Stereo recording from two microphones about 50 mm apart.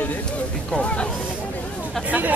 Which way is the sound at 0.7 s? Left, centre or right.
Left.